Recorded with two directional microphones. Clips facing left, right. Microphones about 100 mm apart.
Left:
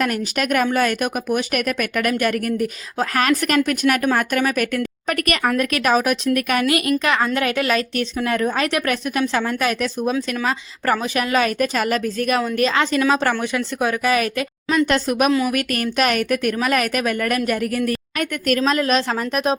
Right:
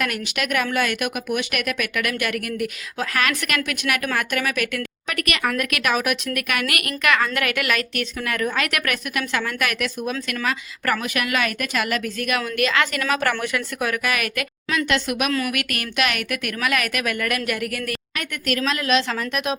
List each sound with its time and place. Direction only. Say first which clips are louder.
0.0 s a woman's voice: left 4 dB; 40° left (ahead or behind)
15.3 s a woman's voice: left 5 dB; 20° left (ahead or behind)
15.5 s speech: left 5 dB; 35° left (ahead or behind)